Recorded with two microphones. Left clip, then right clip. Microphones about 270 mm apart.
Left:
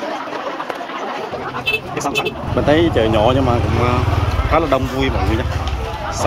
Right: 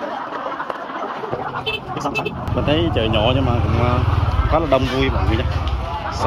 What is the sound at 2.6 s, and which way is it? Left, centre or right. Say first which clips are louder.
Speech: left 5 dB; centre.